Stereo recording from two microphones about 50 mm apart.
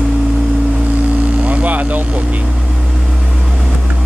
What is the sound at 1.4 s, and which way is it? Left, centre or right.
Vehicle, right.